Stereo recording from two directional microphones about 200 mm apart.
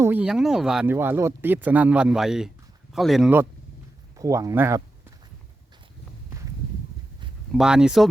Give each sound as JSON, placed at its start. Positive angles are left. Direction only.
{"t": 0.0, "sound": "speech", "side_deg": -10}
{"t": 4.2, "sound": "speech", "side_deg": -15}
{"t": 7.5, "sound": "speech", "side_deg": -5}